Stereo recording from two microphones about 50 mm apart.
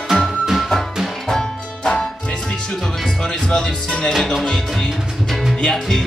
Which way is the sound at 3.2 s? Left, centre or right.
Centre.